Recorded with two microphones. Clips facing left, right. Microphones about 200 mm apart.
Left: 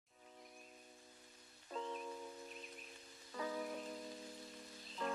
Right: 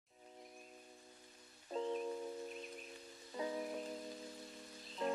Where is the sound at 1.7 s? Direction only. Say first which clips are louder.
Right 6 dB; 35° right (ahead or behind).